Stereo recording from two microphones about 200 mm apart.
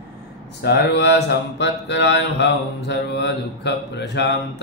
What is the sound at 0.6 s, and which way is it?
Mantra, 55° left (ahead or behind).